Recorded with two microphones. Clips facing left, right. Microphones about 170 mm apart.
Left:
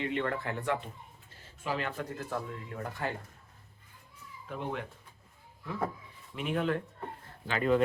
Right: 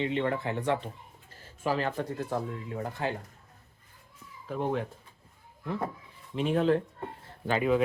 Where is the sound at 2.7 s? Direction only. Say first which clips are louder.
Right 3 dB; 20° right (ahead or behind).